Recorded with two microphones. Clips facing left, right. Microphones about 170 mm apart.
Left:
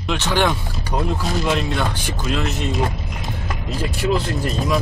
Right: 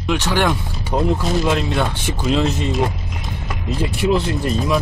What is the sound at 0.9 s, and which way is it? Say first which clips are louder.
Speech: right 4 dB; 30° right (ahead or behind).